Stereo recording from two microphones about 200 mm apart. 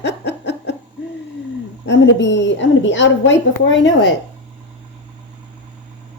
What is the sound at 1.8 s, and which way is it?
A woman's voice, 60° left (ahead or behind).